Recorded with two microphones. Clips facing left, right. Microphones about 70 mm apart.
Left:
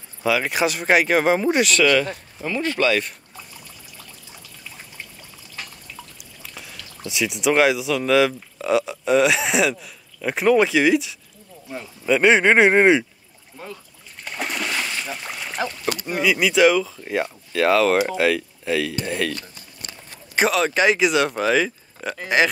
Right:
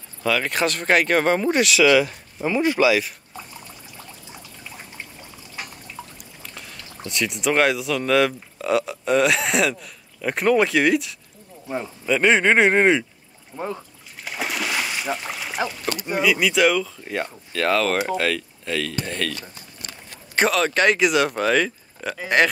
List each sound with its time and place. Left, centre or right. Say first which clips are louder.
0.2 s speech: left 1 dB; centre
2.4 s speech: right 3 dB; centre
7.1 s speech: left 2 dB; centre
11.6 s speech: right 6 dB; right
12.1 s speech: left 2 dB; centre
13.5 s speech: right 8 dB; right
14.2 s splash: even; centre
16.0 s speech: right 1 dB; centre
20.3 s speech: even; centre